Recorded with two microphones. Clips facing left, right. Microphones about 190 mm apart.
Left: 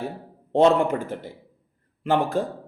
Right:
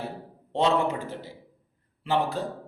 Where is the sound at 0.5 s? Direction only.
50° left (ahead or behind).